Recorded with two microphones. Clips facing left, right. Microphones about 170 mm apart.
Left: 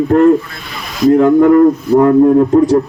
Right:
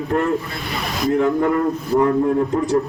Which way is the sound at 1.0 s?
55° left (ahead or behind).